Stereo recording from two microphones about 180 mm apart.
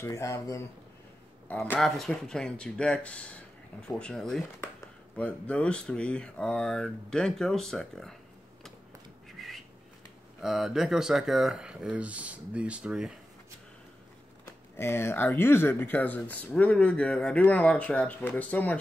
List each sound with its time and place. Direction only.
0.0 s speech: 15° left (ahead or behind)
9.4 s a sound: centre (ahead or behind)
10.4 s speech: 5° right (ahead or behind)
14.4 s speech: 15° left (ahead or behind)